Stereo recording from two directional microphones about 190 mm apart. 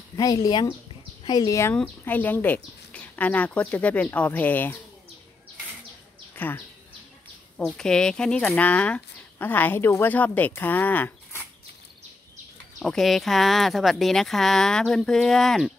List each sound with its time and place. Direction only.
0.1 s speech: 20° left (ahead or behind)
6.3 s a sound: 10° left (ahead or behind)
7.5 s speech: 5° left (ahead or behind)
12.7 s speech: centre (ahead or behind)